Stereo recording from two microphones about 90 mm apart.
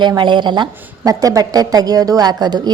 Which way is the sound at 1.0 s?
40° right (ahead or behind).